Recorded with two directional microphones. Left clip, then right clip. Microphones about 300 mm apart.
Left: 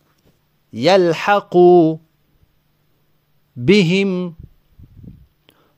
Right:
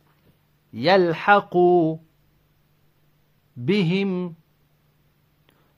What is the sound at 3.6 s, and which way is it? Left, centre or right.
Mantra, left.